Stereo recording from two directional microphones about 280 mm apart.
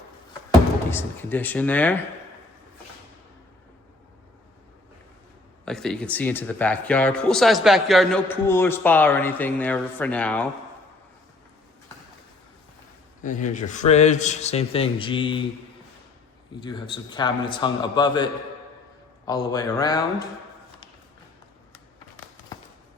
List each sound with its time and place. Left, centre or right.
0.9 s a man's voice: centre
5.6 s speech: centre
13.2 s a man's voice: left
16.6 s a man's voice: centre
22.5 s a sound: centre